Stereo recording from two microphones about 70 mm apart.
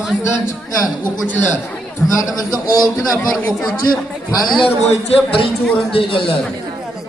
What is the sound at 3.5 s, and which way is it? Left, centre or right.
A man's voice, centre.